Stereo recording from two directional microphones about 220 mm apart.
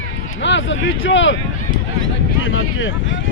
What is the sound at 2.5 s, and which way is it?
Vehicle, 60° left (ahead or behind).